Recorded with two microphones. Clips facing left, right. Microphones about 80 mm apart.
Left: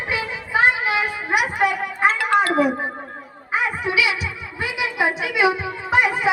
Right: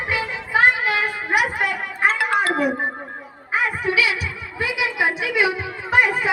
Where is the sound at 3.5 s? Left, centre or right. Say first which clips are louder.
Even; centre.